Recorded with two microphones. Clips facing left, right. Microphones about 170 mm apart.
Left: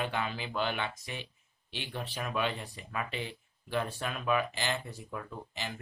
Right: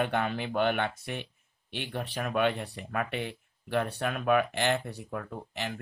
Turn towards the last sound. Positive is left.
turn(degrees=-60)  # may be behind; listen again after turning